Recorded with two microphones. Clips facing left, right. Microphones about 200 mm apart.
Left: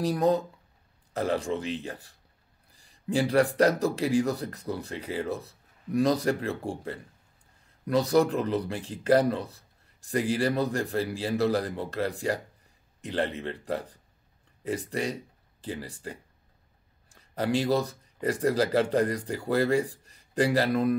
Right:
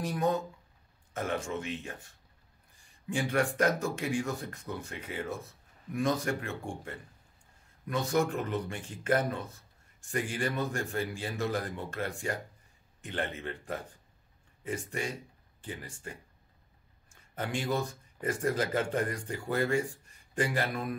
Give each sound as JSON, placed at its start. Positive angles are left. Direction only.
{"t": 0.0, "sound": "speech", "side_deg": 35}